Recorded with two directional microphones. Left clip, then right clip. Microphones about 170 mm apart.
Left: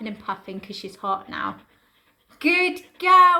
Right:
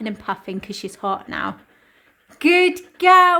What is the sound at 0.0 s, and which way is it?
Speech, 50° right (ahead or behind).